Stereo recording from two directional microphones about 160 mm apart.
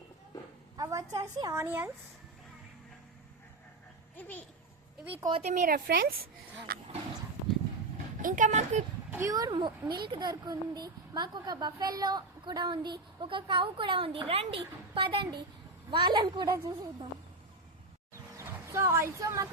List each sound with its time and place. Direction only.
0.8 s a woman's voice: 20° right (ahead or behind)
4.2 s a child's voice: 10° left (ahead or behind)
5.3 s speech: 45° right (ahead or behind); by 6.8 s 65° right (ahead or behind)
8.2 s speech: 55° right (ahead or behind)
9.0 s a woman's voice: 15° right (ahead or behind)
18.3 s speech: 15° right (ahead or behind)